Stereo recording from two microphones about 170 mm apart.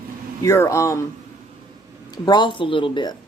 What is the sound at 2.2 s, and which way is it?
Speech, 25° left (ahead or behind).